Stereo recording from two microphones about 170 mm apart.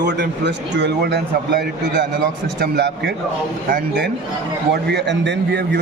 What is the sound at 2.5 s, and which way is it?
Speech, 70° right (ahead or behind).